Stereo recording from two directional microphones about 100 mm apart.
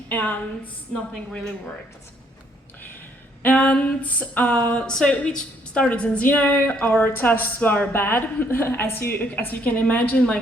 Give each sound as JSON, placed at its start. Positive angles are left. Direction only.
{"t": 0.1, "sound": "a woman's voice", "side_deg": 20}
{"t": 3.4, "sound": "speech", "side_deg": 15}